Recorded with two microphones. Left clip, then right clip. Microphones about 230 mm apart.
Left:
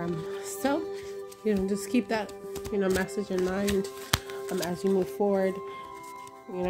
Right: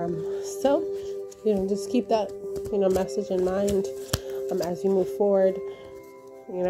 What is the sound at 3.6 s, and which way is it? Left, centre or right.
Speech, left.